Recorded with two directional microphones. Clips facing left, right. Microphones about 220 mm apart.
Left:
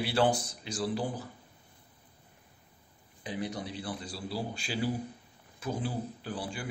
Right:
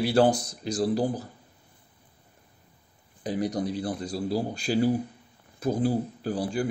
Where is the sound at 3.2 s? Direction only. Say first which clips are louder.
Right 8 dB; 40° right (ahead or behind).